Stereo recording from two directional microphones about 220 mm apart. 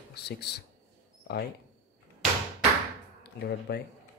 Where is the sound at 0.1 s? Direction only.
45° left (ahead or behind).